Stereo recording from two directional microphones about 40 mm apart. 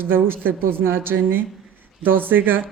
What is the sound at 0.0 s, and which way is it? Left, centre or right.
Speech, right.